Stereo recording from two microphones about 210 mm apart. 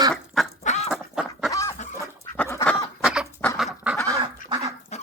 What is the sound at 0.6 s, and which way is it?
Duck, 30° left (ahead or behind).